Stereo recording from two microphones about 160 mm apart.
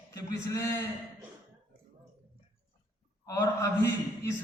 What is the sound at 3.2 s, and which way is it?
A man's voice, 20° left (ahead or behind).